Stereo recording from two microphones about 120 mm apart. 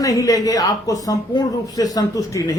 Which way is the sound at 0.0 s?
30° left (ahead or behind).